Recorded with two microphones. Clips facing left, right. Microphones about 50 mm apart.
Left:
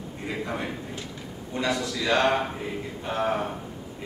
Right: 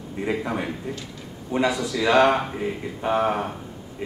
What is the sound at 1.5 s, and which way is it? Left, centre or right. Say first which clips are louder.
Speech: right 8 dB; right.